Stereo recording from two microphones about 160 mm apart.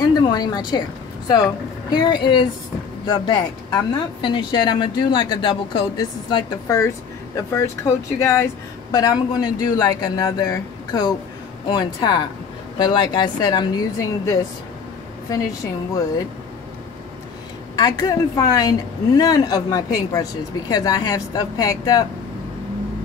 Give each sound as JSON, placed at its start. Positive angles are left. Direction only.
{"t": 0.0, "sound": "a sound", "side_deg": 25}
{"t": 1.9, "sound": "a woman's voice", "side_deg": 25}
{"t": 17.7, "sound": "a woman's voice", "side_deg": 25}